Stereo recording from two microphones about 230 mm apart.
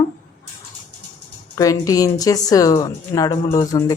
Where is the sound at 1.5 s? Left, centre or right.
Centre.